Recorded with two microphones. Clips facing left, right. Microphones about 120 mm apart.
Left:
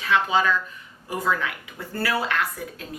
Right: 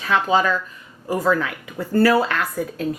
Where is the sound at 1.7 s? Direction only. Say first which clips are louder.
Right 11 dB; 40° right (ahead or behind).